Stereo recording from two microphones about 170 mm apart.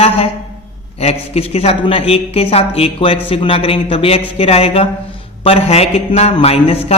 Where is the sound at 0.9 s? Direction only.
35° left (ahead or behind).